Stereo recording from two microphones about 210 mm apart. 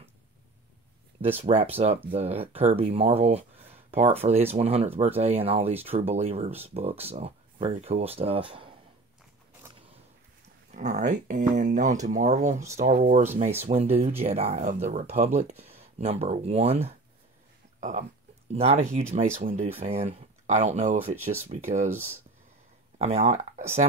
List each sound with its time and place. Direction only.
1.4 s speech: 25° right (ahead or behind)
10.7 s speech: 35° right (ahead or behind)
22.9 s speech: 30° right (ahead or behind)